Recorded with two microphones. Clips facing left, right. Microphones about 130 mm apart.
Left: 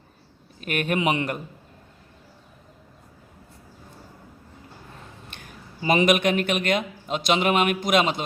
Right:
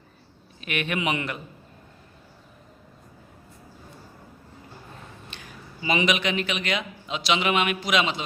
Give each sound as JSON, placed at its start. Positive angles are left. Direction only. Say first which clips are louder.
{"t": 0.6, "sound": "a man's voice", "louder": "left 4 dB", "side_deg": 45}
{"t": 5.3, "sound": "a man's voice", "louder": "even", "side_deg": 50}